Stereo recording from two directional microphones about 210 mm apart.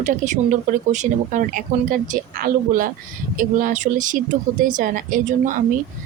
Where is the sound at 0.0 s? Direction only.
35° right (ahead or behind).